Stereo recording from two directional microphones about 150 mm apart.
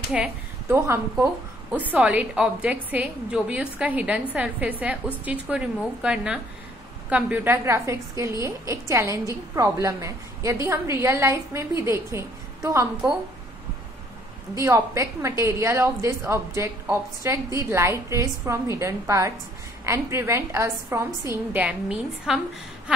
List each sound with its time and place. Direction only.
0.1 s a woman's voice: 10° right (ahead or behind)
14.6 s a woman's voice: 20° right (ahead or behind)